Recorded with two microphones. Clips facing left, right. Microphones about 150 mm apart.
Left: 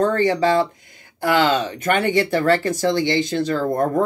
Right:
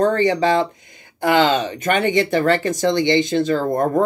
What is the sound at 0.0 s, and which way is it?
Speech, 15° right (ahead or behind).